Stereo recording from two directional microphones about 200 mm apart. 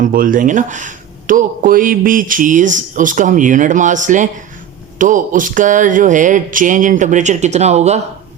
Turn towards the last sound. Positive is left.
turn(degrees=-35)  # may be behind; listen again after turning